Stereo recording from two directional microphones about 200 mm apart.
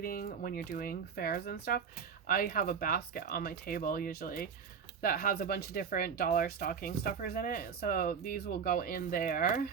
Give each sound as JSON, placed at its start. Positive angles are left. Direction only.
{"t": 0.0, "sound": "speech", "side_deg": 50}